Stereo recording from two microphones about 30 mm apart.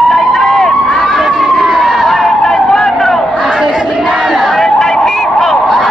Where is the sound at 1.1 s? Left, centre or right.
Centre.